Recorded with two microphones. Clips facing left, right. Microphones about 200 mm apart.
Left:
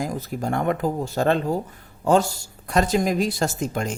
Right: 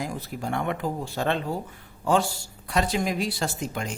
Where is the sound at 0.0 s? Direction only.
45° left (ahead or behind).